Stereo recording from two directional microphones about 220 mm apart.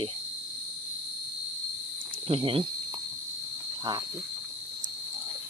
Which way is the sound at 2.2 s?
25° right (ahead or behind).